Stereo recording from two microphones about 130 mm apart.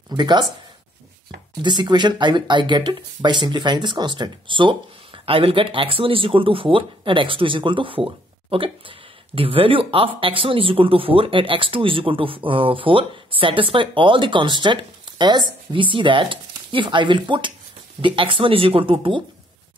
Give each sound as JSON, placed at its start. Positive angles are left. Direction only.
{"t": 0.1, "sound": "speech", "side_deg": -35}
{"t": 1.6, "sound": "speech", "side_deg": -35}